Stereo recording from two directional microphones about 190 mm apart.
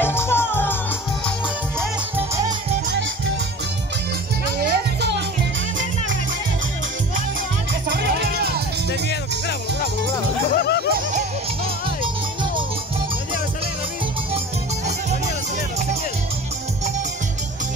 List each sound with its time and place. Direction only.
0.0 s music: 10° left (ahead or behind)
4.6 s music: 60° right (ahead or behind)
7.9 s music: 55° right (ahead or behind)
10.5 s music: 60° left (ahead or behind)